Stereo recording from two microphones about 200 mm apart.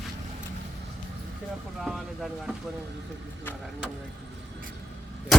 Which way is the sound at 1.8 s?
Centre (ahead or behind).